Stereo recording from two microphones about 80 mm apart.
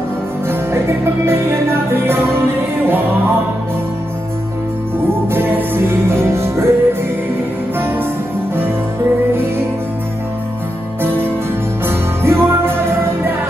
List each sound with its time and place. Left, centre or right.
0.5 s music: right
5.3 s music: right
12.2 s music: right